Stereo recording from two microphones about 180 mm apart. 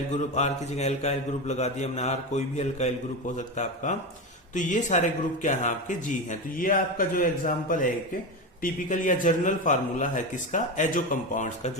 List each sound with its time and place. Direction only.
0.1 s mantra: 40° left (ahead or behind)
4.5 s speech: 45° left (ahead or behind)